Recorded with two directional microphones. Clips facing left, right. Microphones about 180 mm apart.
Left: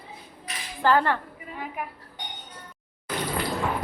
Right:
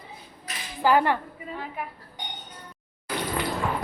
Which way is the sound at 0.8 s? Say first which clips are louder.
Right 1 dB; 15° right (ahead or behind).